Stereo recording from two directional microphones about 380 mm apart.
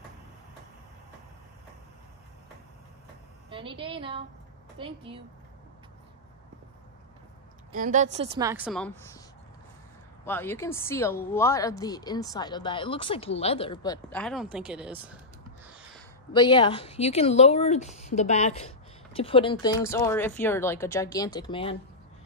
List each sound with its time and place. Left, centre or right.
3.4 s a woman's voice: centre
7.7 s a woman's voice: centre
10.2 s a woman's voice: centre
15.6 s a sound: centre
16.3 s speech: centre